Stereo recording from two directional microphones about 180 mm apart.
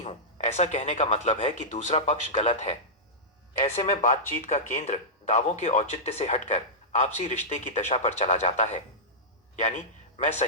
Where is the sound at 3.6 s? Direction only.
40° left (ahead or behind).